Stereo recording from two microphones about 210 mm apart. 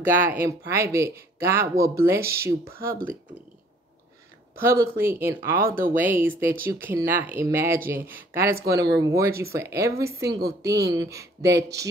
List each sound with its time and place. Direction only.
0.7 s speech: 15° right (ahead or behind)
4.6 s speech: 15° right (ahead or behind)
5.6 s speech: 45° right (ahead or behind)
5.9 s speech: 10° right (ahead or behind)